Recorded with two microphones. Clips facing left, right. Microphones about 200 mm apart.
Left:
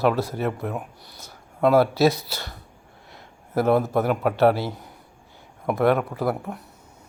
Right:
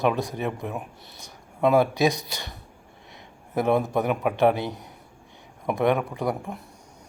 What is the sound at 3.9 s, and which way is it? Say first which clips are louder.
Speech: left 2 dB; 15° right (ahead or behind).